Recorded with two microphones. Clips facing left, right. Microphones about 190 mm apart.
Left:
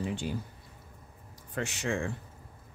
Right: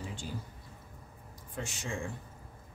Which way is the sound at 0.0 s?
65° left (ahead or behind).